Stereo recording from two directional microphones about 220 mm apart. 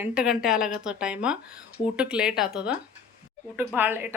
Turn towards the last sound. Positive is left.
turn(degrees=-10)  # may be behind; listen again after turning